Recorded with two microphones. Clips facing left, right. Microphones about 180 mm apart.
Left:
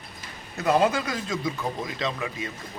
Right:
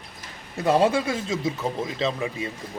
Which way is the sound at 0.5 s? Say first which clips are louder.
Right 2 dB; 30° right (ahead or behind).